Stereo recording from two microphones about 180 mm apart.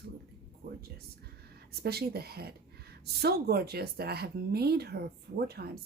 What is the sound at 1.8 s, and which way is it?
A woman's voice, 60° right (ahead or behind).